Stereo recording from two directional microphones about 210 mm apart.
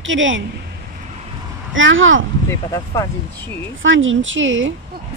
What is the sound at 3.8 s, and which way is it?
Speech, 65° right (ahead or behind).